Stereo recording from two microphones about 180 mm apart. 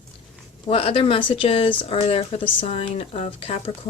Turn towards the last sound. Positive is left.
turn(degrees=35)  # may be behind; listen again after turning